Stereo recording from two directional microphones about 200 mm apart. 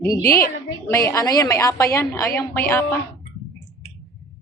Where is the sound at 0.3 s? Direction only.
45° left (ahead or behind).